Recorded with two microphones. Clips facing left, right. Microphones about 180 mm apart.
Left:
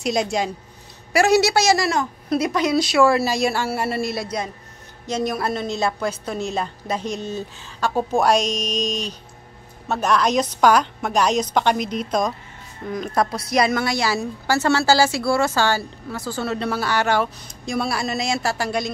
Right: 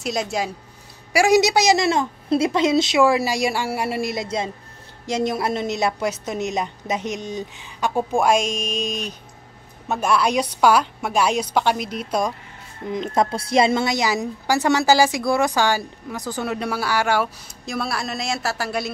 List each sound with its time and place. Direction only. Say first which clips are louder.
0.0 s speech: left 3 dB; centre (ahead or behind)
1.1 s a woman's voice: even; 15° right (ahead or behind)
8.4 s music: left 1 dB; 35° left (ahead or behind)
9.8 s a woman's voice: even; 10° right (ahead or behind)
12.9 s a woman's voice: right 1 dB; 20° right (ahead or behind); by 18.9 s 5° right (ahead or behind)